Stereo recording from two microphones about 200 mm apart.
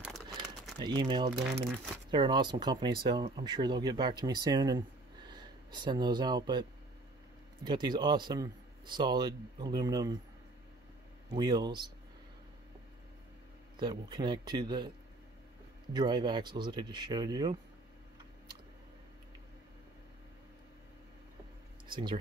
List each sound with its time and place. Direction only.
0.7 s a man's voice: 20° right (ahead or behind)
7.6 s a man's voice: 20° right (ahead or behind)
11.3 s a man's voice: 20° right (ahead or behind)
13.7 s a man's voice: 20° right (ahead or behind)
15.9 s a man's voice: 20° right (ahead or behind)
21.8 s speech: 25° right (ahead or behind)